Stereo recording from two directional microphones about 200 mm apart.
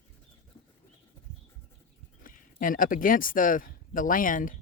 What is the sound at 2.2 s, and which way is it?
Speech, 45° left (ahead or behind).